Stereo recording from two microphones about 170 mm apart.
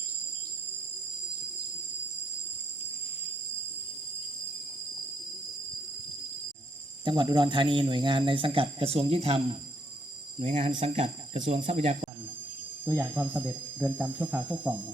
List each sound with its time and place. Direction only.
7.0 s speech: 30° right (ahead or behind)
10.4 s speech: 45° right (ahead or behind)
12.8 s speech: 10° right (ahead or behind)